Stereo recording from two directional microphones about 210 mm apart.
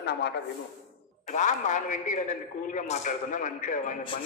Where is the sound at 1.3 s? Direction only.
35° left (ahead or behind).